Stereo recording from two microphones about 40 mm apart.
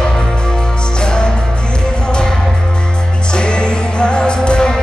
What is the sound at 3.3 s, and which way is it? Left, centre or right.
Music, left.